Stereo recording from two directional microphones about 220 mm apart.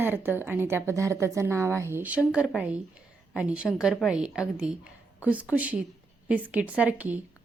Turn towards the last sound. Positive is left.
turn(degrees=-5)  # may be behind; listen again after turning